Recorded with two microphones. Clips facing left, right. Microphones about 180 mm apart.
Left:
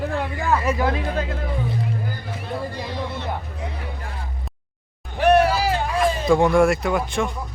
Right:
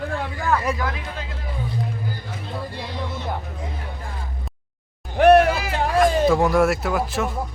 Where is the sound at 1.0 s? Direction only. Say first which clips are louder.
Left 8 dB; 50° left (ahead or behind).